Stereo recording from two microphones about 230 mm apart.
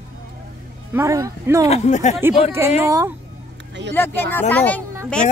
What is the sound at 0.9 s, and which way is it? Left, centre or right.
Speech, centre.